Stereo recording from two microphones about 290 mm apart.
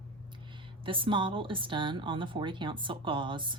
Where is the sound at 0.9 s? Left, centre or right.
Centre.